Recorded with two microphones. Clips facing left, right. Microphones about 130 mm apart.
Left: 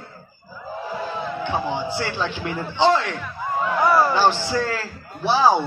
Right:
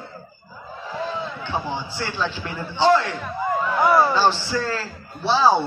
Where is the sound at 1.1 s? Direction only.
15° left (ahead or behind).